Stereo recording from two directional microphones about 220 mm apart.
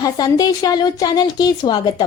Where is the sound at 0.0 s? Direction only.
20° left (ahead or behind).